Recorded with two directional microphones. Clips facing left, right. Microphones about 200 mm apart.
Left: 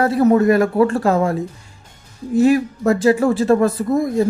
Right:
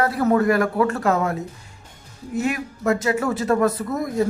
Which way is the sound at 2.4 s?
35° left (ahead or behind).